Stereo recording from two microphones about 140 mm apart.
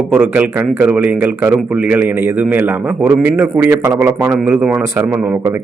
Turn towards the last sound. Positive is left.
turn(degrees=-15)  # may be behind; listen again after turning